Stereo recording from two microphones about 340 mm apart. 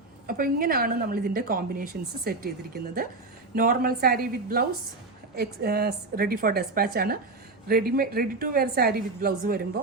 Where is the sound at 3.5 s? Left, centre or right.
Right.